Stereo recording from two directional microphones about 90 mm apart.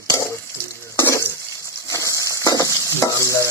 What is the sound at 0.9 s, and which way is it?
Stir, 30° left (ahead or behind).